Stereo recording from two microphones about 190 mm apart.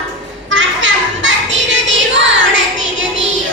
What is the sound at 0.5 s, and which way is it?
Children playing, 75° right (ahead or behind).